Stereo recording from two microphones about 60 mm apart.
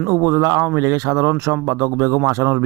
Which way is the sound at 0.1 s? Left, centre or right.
Right.